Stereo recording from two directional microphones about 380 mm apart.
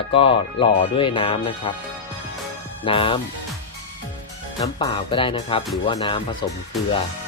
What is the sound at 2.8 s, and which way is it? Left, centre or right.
Speech, centre.